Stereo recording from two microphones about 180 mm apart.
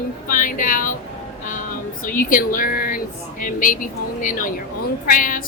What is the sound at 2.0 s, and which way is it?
A woman's voice, 50° left (ahead or behind).